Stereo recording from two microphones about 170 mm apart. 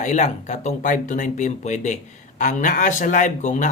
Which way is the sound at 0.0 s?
45° left (ahead or behind).